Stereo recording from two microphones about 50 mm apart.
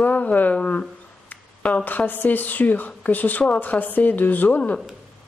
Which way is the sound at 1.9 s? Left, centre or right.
Left.